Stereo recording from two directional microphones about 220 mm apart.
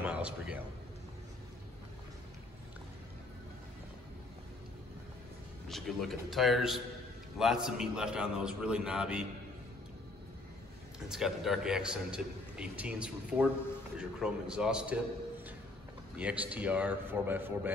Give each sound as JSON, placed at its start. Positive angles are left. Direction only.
{"t": 0.0, "sound": "a sound", "side_deg": -5}
{"t": 5.7, "sound": "a man's voice", "side_deg": 0}
{"t": 11.1, "sound": "a man's voice", "side_deg": 0}
{"t": 16.2, "sound": "speech", "side_deg": -5}